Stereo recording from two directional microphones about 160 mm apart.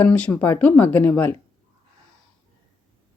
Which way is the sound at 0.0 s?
10° left (ahead or behind).